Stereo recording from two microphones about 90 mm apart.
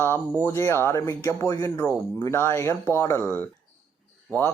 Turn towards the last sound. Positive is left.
turn(degrees=20)  # may be behind; listen again after turning